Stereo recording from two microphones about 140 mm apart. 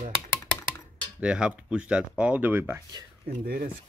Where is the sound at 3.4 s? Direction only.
90° right.